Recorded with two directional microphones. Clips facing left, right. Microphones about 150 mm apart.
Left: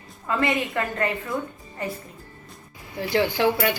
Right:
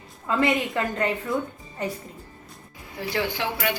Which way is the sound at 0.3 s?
15° right (ahead or behind).